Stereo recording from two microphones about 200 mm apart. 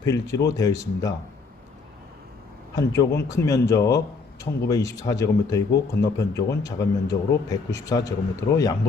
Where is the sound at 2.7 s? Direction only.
15° left (ahead or behind).